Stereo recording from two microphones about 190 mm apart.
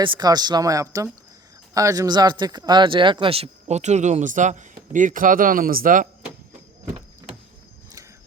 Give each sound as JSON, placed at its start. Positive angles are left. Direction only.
{"t": 0.0, "sound": "speech", "side_deg": -25}